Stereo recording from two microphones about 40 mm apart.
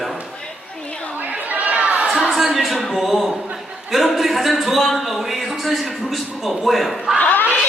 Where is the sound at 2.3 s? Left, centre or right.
Centre.